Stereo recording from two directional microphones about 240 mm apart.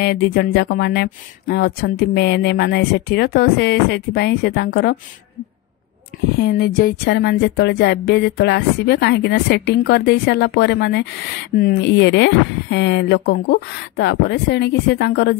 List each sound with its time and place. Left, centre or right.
0.0 s speech: left
6.3 s speech: left